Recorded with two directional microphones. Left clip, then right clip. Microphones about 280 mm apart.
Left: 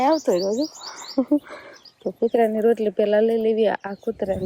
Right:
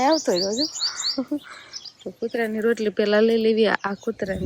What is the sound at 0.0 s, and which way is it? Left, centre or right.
Speech, centre.